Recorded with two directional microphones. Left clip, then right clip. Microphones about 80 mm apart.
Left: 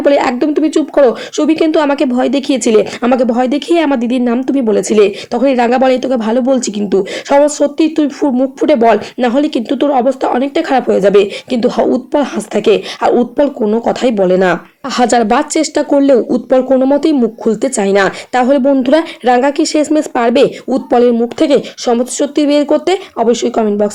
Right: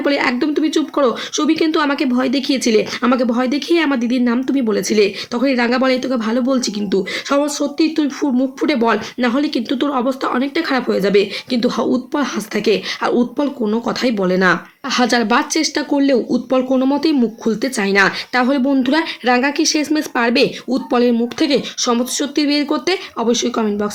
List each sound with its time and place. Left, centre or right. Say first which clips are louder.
0.0 s speech: left 6 dB; left